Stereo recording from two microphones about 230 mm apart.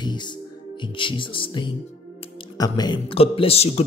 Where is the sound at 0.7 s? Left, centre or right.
Left.